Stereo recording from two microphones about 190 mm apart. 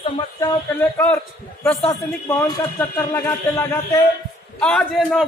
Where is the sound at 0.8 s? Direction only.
10° left (ahead or behind).